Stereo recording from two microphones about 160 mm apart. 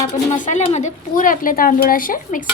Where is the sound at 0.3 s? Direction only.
50° left (ahead or behind).